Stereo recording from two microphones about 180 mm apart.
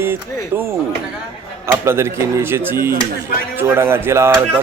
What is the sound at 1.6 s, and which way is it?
Speech, 15° right (ahead or behind).